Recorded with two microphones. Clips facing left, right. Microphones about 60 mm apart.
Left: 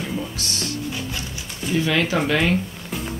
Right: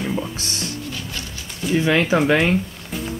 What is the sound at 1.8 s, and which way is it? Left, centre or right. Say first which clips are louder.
Speech: right 3 dB; right.